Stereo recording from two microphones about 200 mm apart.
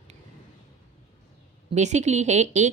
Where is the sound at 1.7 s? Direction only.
35° right (ahead or behind).